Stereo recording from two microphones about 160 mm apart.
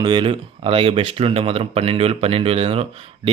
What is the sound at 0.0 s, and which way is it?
Speech, 30° right (ahead or behind).